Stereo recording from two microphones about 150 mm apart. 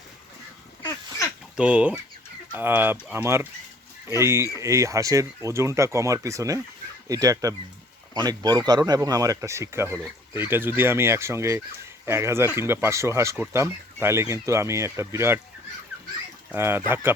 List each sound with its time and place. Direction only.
0.8 s a sound: 20° left (ahead or behind)
1.5 s speech: 5° right (ahead or behind)
16.5 s speech: 15° right (ahead or behind)